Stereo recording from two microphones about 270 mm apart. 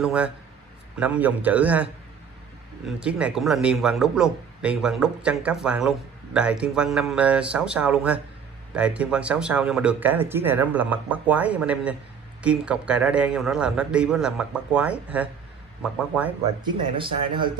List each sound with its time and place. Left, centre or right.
0.0 s speech: centre
3.0 s speech: centre
16.6 s speech: centre